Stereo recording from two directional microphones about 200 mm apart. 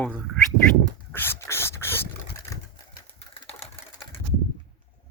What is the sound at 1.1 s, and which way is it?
Dog, 10° left (ahead or behind).